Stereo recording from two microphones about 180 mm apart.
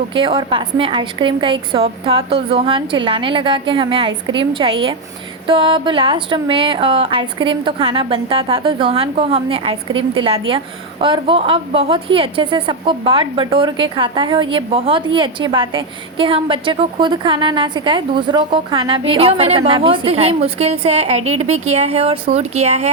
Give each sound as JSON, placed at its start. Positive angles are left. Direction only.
{"t": 0.1, "sound": "a woman's voice", "side_deg": -30}